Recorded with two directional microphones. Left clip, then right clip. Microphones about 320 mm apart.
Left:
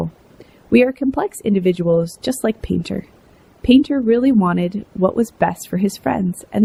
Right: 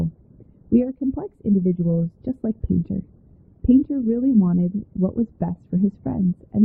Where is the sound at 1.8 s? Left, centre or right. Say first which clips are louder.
Left 10 dB; centre.